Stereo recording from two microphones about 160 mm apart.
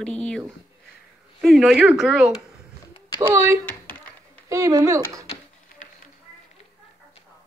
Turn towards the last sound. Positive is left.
turn(degrees=55)  # may be behind; listen again after turning